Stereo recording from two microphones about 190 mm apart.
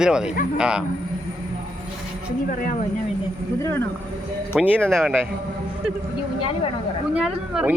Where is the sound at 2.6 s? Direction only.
45° left (ahead or behind).